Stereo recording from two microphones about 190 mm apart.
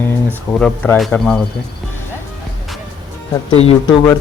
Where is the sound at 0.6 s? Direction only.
5° left (ahead or behind).